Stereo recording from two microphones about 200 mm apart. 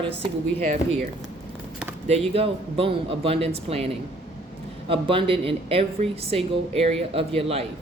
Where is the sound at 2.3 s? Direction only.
30° right (ahead or behind).